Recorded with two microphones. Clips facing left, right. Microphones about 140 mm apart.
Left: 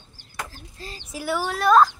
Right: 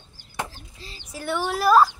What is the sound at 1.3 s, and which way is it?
Speech, centre (ahead or behind).